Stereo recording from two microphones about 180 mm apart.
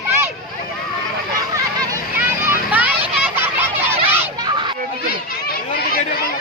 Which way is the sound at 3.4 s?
10° right (ahead or behind).